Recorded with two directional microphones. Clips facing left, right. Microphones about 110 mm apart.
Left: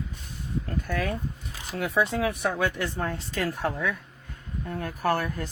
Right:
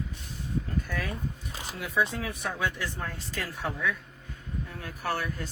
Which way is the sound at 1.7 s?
60° left (ahead or behind).